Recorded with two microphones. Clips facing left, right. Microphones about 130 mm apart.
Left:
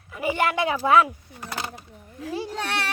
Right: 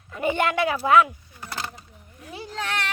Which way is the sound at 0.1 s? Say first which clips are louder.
Right 1 dB; 10° left (ahead or behind).